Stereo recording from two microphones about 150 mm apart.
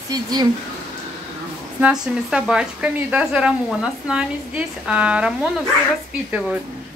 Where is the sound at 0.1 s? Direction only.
25° right (ahead or behind).